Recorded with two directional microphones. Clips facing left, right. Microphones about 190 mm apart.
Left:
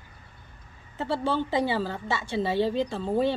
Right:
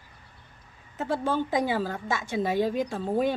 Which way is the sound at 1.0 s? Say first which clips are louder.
Even; 15° right (ahead or behind).